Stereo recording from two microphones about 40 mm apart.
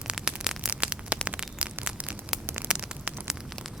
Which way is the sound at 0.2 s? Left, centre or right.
Centre.